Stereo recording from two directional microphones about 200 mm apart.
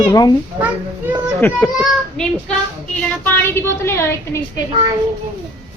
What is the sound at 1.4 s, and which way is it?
A woman's voice, 10° left (ahead or behind).